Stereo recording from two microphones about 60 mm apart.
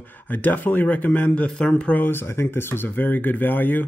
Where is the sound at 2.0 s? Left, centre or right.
Left.